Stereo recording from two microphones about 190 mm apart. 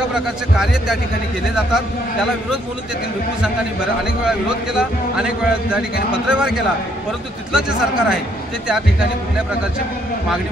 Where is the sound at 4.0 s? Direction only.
5° right (ahead or behind).